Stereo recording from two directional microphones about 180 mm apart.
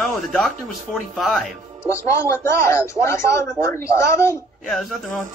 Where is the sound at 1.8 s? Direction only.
15° left (ahead or behind).